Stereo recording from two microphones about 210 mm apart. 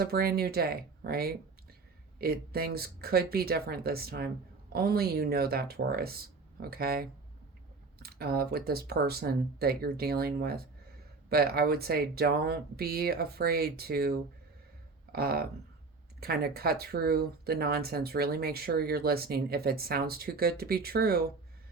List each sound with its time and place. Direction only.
0.0 s speech: 45° right (ahead or behind)